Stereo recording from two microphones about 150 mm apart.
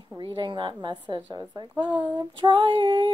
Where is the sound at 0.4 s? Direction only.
30° right (ahead or behind).